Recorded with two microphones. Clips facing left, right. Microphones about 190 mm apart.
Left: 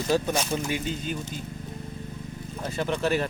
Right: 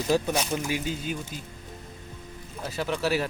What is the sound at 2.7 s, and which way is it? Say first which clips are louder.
Speech: left 1 dB; 5° right (ahead or behind).